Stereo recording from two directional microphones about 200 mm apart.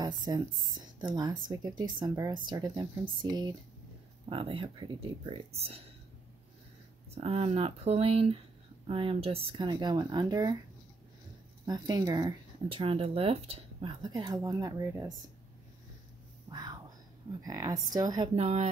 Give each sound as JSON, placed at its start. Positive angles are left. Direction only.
{"t": 0.0, "sound": "speech", "side_deg": -20}
{"t": 7.2, "sound": "speech", "side_deg": -30}
{"t": 11.6, "sound": "speech", "side_deg": -20}
{"t": 16.4, "sound": "whispering", "side_deg": -20}
{"t": 17.4, "sound": "speech", "side_deg": -15}